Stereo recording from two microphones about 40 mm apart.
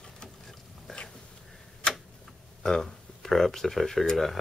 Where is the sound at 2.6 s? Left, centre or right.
Centre.